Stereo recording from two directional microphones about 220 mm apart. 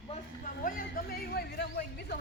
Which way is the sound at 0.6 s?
45° left (ahead or behind).